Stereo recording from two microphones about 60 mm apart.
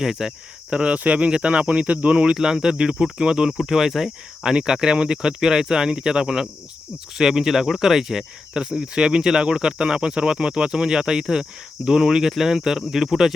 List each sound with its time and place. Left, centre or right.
0.0 s speech: centre
0.7 s speech: centre